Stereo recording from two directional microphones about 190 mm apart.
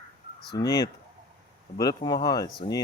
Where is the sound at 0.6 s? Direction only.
20° left (ahead or behind).